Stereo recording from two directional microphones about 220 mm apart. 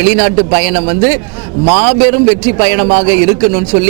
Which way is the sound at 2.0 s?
10° right (ahead or behind).